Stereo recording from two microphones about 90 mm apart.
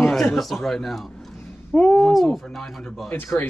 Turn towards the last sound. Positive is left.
turn(degrees=25)  # may be behind; listen again after turning